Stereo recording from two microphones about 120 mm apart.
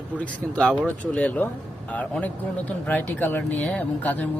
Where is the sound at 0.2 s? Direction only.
5° left (ahead or behind).